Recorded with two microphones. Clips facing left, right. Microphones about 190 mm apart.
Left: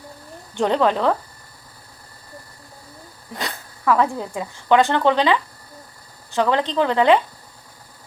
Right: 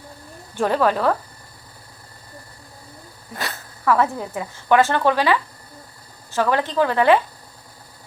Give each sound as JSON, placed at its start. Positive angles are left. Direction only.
{"t": 0.5, "sound": "speech", "side_deg": 20}
{"t": 3.3, "sound": "a sound", "side_deg": 15}
{"t": 4.3, "sound": "speech", "side_deg": 15}